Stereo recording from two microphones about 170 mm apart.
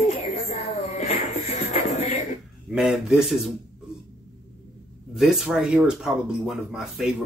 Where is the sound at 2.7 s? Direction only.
5° right (ahead or behind).